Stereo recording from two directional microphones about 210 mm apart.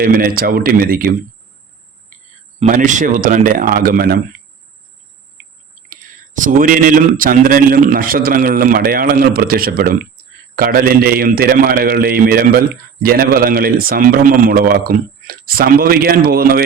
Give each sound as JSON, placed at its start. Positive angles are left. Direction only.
{"t": 0.0, "sound": "a man's voice", "side_deg": -45}
{"t": 2.6, "sound": "speech", "side_deg": -35}
{"t": 5.9, "sound": "a man's voice", "side_deg": -40}